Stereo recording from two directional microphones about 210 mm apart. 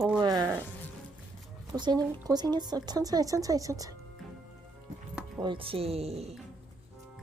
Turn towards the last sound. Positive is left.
turn(degrees=-30)  # may be behind; listen again after turning